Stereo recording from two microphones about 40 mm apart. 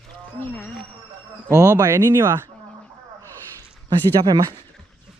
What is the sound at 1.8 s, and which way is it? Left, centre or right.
Speech, right.